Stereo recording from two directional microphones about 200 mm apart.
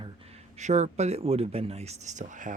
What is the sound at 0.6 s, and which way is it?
Speech, 35° right (ahead or behind).